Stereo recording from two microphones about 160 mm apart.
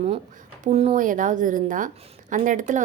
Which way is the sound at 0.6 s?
40° right (ahead or behind).